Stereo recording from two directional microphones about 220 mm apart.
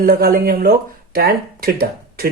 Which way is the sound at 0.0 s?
40° right (ahead or behind).